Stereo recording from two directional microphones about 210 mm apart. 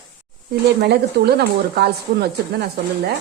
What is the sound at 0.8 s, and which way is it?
Speech, 50° right (ahead or behind).